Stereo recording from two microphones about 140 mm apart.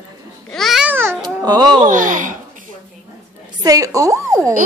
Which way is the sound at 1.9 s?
70° right (ahead or behind).